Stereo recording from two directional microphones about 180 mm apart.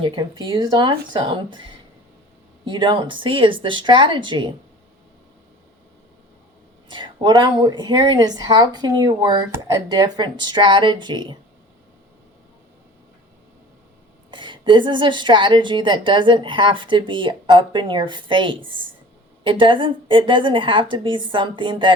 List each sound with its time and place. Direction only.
0.0 s a woman's voice: 25° right (ahead or behind)
2.6 s a woman's voice: 25° right (ahead or behind)
6.9 s a woman's voice: 25° right (ahead or behind)
14.3 s a woman's voice: 25° right (ahead or behind)